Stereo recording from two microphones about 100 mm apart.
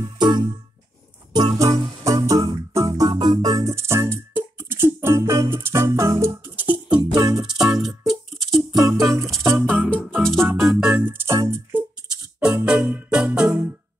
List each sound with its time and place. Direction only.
0.0 s music: 50° right (ahead or behind); by 6.7 s 20° right (ahead or behind)
6.7 s music: 50° right (ahead or behind)
8.1 s music: centre (ahead or behind)
9.0 s music: 30° right (ahead or behind)
9.8 s music: 10° left (ahead or behind)
10.6 s organ: 5° right (ahead or behind)
11.2 s music: 30° right (ahead or behind)
12.4 s music: 10° right (ahead or behind)